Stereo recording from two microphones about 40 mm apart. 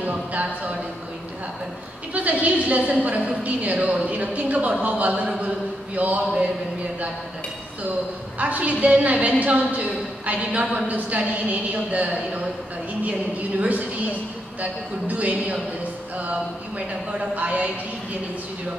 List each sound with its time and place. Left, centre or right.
0.3 s a sound: right
2.1 s a woman's voice: right
8.4 s a woman's voice: right
13.6 s a woman's voice: right
16.7 s speech: right
17.4 s a woman's voice: right